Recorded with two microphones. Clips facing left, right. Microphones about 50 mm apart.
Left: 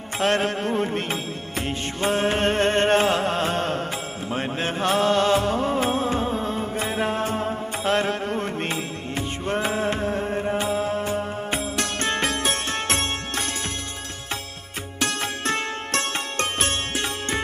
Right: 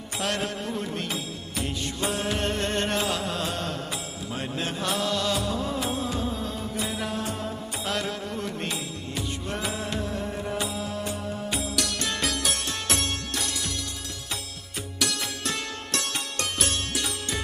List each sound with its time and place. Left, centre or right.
0.2 s music: left
14.9 s music: left